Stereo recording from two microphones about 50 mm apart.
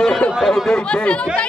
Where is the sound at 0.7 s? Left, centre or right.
Centre.